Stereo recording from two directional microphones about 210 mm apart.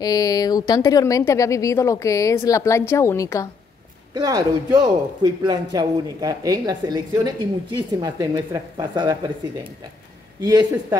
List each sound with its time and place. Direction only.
0.0 s a woman's voice: 20° left (ahead or behind)
4.1 s a man's voice: 15° right (ahead or behind)